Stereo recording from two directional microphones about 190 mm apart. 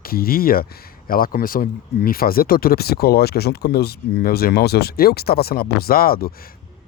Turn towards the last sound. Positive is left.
turn(degrees=50)  # may be behind; listen again after turning